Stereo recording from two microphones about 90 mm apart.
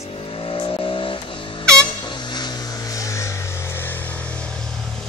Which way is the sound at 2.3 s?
45° left (ahead or behind).